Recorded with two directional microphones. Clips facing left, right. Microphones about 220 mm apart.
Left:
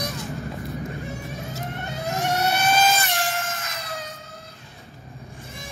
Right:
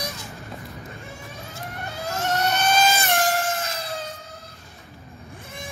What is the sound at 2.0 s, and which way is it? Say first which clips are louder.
Vehicle: left 1 dB; 15° left (ahead or behind).